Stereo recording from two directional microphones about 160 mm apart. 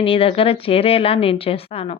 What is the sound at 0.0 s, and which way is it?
A woman's voice, 35° left (ahead or behind).